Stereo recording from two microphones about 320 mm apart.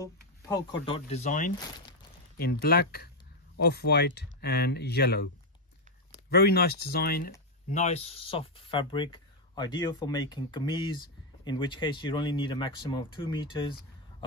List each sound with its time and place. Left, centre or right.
0.7 s speech: centre; by 5.3 s left
6.3 s speech: left; by 13.7 s centre